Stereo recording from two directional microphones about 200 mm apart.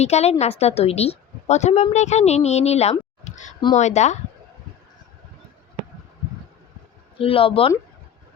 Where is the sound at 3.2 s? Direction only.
35° left (ahead or behind).